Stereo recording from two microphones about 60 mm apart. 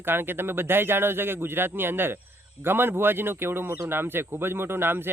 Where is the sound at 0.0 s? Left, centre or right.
Right.